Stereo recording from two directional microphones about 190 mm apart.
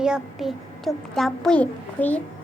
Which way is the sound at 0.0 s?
5° right (ahead or behind).